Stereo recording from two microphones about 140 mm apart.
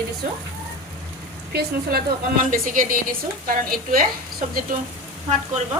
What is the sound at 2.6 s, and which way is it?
A woman's voice, 70° right (ahead or behind).